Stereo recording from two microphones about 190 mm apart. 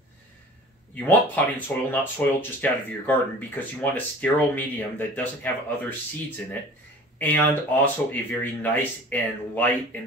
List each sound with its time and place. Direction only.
0.9 s speech: 10° left (ahead or behind)